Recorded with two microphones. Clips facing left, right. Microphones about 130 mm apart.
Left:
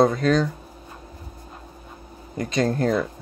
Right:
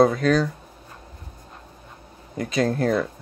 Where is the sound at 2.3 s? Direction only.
Centre (ahead or behind).